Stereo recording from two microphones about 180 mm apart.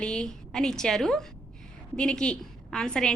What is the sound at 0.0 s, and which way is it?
A woman's voice, 5° left (ahead or behind).